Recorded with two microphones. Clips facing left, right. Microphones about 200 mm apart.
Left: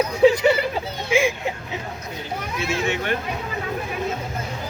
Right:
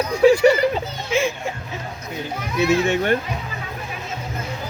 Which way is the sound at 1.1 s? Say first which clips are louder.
Left 1 dB; 15° left (ahead or behind).